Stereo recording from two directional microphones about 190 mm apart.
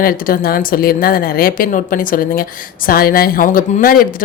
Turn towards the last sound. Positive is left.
turn(degrees=50)  # may be behind; listen again after turning